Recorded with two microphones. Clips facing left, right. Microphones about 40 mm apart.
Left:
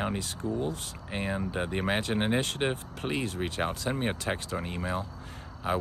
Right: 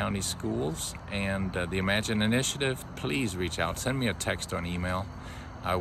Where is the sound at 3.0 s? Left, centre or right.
Right.